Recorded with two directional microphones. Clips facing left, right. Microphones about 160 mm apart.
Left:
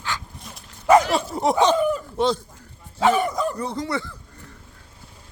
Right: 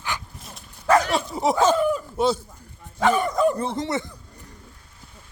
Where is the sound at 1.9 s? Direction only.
10° right (ahead or behind).